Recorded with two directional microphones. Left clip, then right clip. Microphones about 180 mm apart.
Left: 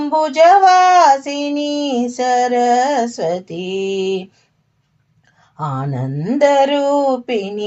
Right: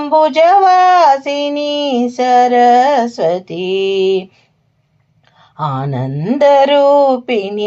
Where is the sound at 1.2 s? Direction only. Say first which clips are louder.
Right 4 dB; 25° right (ahead or behind).